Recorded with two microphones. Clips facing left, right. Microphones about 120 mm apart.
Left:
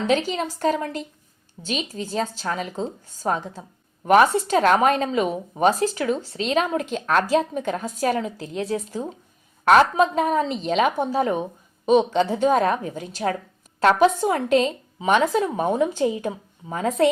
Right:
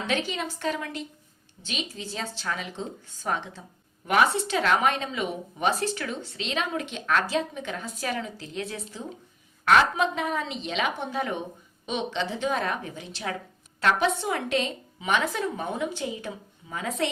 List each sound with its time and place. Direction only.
0.0 s a woman's voice: 40° left (ahead or behind)